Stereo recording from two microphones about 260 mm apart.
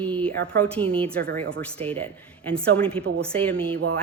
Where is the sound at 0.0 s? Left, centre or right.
Centre.